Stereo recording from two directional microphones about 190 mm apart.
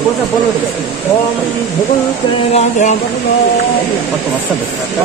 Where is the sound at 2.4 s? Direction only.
35° left (ahead or behind).